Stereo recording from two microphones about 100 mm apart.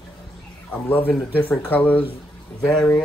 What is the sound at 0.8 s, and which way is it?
Speech, 20° left (ahead or behind).